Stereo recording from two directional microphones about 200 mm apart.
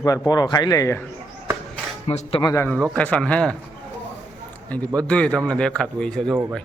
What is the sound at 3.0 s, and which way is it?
Speech, 5° left (ahead or behind).